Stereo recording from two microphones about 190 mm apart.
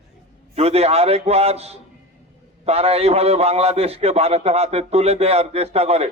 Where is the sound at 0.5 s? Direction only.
30° right (ahead or behind).